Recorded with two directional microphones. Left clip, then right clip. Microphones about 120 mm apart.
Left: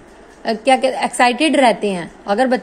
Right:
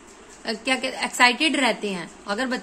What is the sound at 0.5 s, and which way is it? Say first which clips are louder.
A woman's voice: left 11 dB; 45° left (ahead or behind).